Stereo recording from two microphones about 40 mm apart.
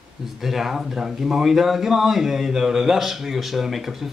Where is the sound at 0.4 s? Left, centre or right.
Centre.